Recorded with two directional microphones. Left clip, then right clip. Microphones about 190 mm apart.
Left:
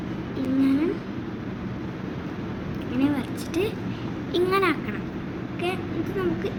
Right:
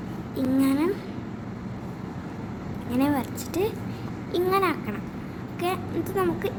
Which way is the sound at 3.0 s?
50° right (ahead or behind).